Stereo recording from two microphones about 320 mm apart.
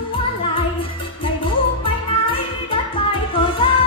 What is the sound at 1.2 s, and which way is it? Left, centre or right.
Music, centre.